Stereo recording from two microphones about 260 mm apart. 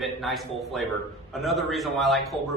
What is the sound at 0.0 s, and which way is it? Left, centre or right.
A man's voice, centre.